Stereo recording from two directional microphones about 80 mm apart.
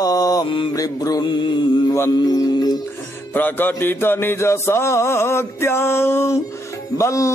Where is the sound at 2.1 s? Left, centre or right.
Left.